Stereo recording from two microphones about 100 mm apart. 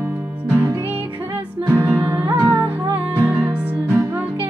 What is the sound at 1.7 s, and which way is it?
Music, 20° right (ahead or behind).